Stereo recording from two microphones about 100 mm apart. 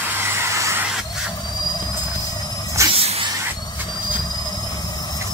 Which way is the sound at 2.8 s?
30° right (ahead or behind).